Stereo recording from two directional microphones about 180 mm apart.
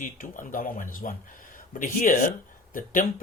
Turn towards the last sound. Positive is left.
turn(degrees=50)  # may be behind; listen again after turning